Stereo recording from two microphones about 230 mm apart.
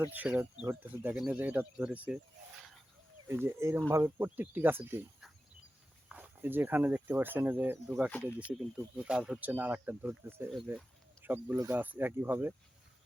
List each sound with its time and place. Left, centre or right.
0.0 s speech: centre
3.2 s speech: centre
8.1 s speech: centre
8.8 s speech: centre